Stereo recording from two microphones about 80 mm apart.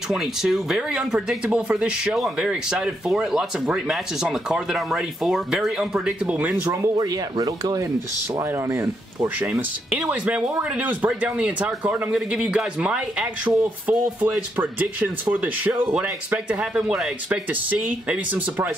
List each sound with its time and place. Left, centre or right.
0.1 s speech: centre
6.6 s speech: right
9.4 s speech: centre